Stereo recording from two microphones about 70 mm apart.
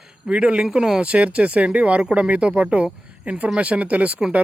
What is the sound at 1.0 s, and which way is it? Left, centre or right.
Speech, centre.